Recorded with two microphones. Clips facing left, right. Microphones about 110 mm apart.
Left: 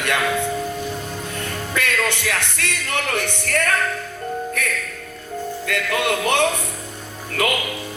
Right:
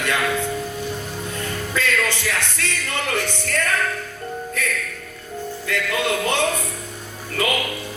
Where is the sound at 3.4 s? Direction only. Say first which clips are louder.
Left 2 dB; 60° left (ahead or behind).